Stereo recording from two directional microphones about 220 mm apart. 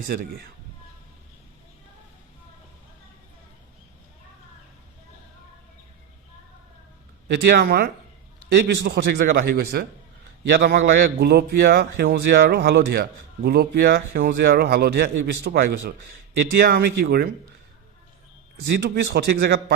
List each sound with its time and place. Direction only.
0.1 s a man's voice: 45° right (ahead or behind)
7.3 s a man's voice: 45° right (ahead or behind)
18.8 s a man's voice: 45° right (ahead or behind)